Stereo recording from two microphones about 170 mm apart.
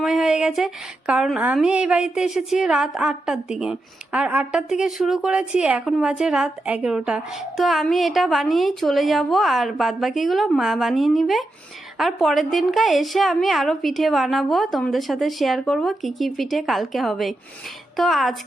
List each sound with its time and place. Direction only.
0.0 s a woman's voice: centre (ahead or behind)